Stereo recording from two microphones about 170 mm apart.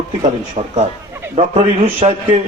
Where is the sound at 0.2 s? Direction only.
40° right (ahead or behind).